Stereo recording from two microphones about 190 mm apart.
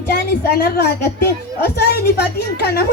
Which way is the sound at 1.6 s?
55° left (ahead or behind).